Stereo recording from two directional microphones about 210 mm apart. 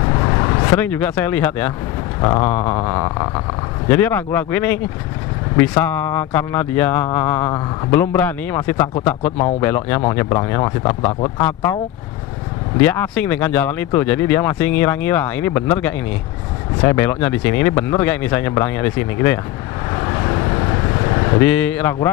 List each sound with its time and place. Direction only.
0.1 s vehicle: 20° left (ahead or behind)
2.2 s a sound: 20° left (ahead or behind)
2.5 s speech: 15° left (ahead or behind)
12.8 s speech: 10° left (ahead or behind)
20.0 s vehicle: 20° left (ahead or behind)
21.5 s speech: 10° left (ahead or behind)